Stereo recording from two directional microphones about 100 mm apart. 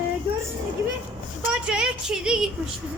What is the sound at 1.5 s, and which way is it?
Speech, 10° right (ahead or behind).